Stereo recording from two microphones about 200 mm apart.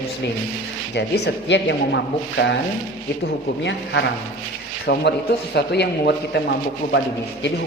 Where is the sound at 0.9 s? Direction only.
60° left (ahead or behind).